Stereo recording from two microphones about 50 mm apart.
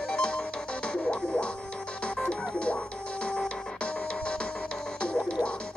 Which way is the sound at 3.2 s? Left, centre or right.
Left.